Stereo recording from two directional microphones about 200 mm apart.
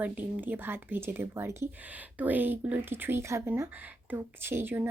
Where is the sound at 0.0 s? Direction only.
10° right (ahead or behind).